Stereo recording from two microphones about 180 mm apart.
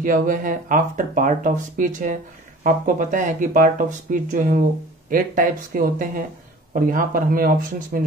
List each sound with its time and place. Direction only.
0.0 s speech: 45° right (ahead or behind)